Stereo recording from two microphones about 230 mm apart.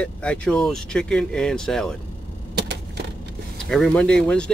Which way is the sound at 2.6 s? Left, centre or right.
Right.